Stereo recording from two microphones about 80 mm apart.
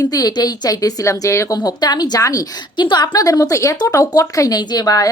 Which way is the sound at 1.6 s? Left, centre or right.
Left.